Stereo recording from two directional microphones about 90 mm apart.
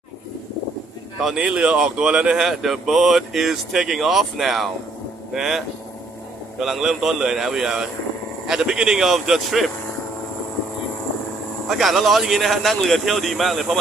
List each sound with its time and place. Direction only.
1.2 s speech: 5° right (ahead or behind)
11.7 s speech: centre (ahead or behind)